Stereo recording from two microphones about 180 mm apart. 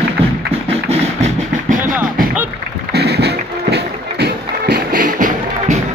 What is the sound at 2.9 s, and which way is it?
Music, 65° right (ahead or behind).